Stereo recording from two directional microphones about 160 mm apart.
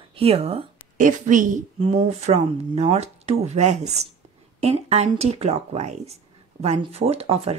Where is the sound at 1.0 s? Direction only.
55° right (ahead or behind).